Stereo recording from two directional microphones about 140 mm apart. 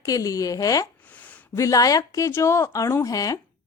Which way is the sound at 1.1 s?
10° left (ahead or behind).